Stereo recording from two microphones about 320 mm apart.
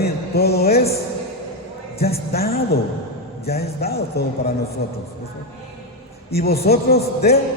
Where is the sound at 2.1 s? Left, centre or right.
Left.